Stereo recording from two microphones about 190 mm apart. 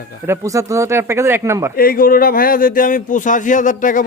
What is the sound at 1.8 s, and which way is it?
Speech, 50° left (ahead or behind).